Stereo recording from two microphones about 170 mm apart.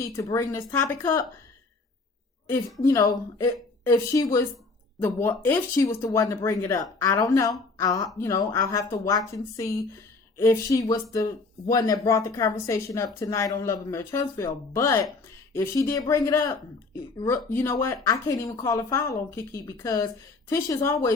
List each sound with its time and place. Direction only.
0.0 s speech: 15° left (ahead or behind)
2.8 s a woman's voice: 20° left (ahead or behind)